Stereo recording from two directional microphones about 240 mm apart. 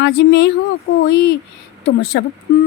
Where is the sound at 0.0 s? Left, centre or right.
Left.